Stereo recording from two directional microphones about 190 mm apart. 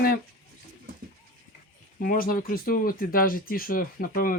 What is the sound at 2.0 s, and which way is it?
Speech, 50° left (ahead or behind).